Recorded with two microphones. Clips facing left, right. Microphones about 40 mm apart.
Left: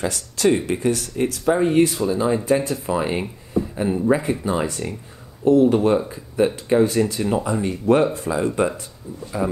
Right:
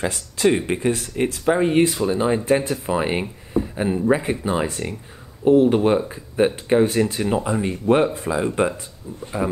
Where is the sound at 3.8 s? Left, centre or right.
Centre; by 7.2 s right.